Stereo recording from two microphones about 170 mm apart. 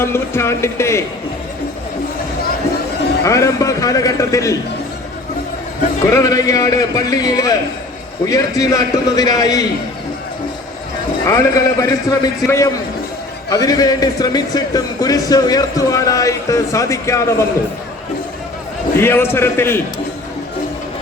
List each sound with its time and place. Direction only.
0.0 s speech: 15° left (ahead or behind)
3.2 s a man's voice: 20° left (ahead or behind)
6.0 s a man's voice: 20° left (ahead or behind)
11.3 s a man's voice: 20° left (ahead or behind)
18.9 s speech: 15° left (ahead or behind)